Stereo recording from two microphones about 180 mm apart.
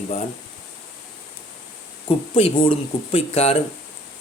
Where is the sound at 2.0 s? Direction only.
30° left (ahead or behind).